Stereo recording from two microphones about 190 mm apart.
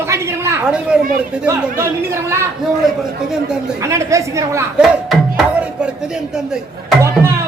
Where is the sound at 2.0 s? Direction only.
15° right (ahead or behind).